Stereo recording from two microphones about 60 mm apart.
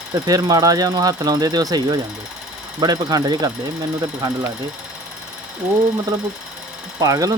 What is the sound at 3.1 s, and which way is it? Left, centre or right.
Speech, right.